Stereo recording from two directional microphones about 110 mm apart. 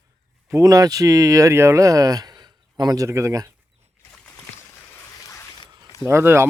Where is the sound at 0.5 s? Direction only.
30° right (ahead or behind).